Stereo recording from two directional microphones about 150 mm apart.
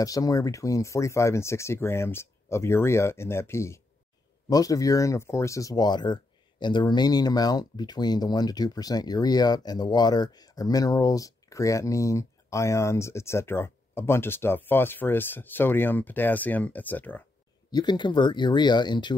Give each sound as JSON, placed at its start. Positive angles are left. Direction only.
{"t": 0.0, "sound": "speech", "side_deg": 25}
{"t": 17.6, "sound": "speech", "side_deg": 30}